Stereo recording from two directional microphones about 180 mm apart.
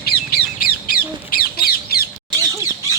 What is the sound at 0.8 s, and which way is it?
Squawk, 55° left (ahead or behind).